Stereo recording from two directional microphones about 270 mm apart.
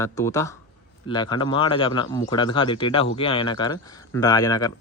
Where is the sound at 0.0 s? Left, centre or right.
Centre.